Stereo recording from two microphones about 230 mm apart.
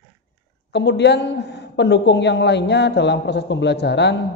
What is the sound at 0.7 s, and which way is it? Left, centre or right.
Speech, left.